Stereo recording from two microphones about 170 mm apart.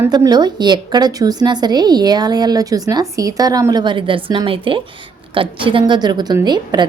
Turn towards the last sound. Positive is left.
turn(degrees=-25)  # may be behind; listen again after turning